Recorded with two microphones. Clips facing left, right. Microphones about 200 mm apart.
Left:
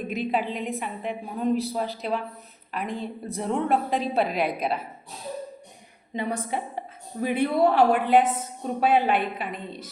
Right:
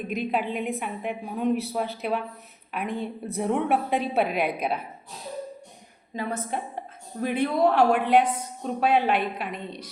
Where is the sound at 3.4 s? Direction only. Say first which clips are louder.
Even; 5° right (ahead or behind).